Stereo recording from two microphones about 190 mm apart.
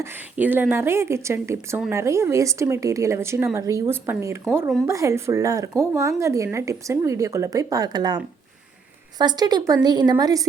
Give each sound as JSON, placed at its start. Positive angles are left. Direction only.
{"t": 0.0, "sound": "a woman's voice", "side_deg": -10}